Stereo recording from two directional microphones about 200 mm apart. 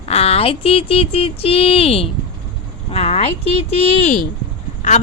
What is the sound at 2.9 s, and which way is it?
Speech, 30° left (ahead or behind).